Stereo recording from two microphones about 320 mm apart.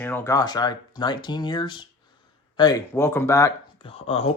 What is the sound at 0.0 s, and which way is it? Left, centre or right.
Speech, centre.